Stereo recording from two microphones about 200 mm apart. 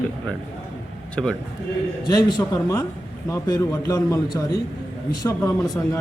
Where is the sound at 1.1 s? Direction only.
5° left (ahead or behind).